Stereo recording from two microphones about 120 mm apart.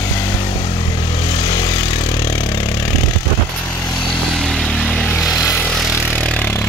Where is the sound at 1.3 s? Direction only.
40° left (ahead or behind).